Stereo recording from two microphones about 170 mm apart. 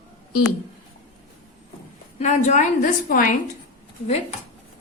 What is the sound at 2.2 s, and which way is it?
A woman's voice, 45° left (ahead or behind).